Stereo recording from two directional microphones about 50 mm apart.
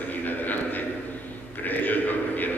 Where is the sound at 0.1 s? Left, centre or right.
Left.